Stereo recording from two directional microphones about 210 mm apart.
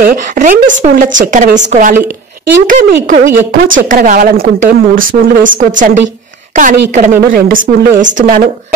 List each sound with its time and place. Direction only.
0.0 s a woman's voice: 40° right (ahead or behind)